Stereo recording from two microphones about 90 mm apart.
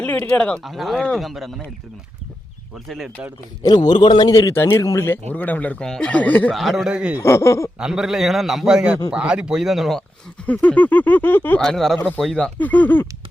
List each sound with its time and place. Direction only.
0.0 s speech: 15° left (ahead or behind)
0.6 s a man's voice: centre (ahead or behind)
3.6 s a man's voice: 50° left (ahead or behind)
4.3 s speech: 40° left (ahead or behind); by 6.5 s 15° left (ahead or behind)
6.5 s a man's voice: centre (ahead or behind)
7.2 s speech: 30° left (ahead or behind)
7.8 s a man's voice: 5° right (ahead or behind)
10.4 s speech: 15° left (ahead or behind)
11.6 s a man's voice: 5° left (ahead or behind)
12.5 s speech: 20° left (ahead or behind)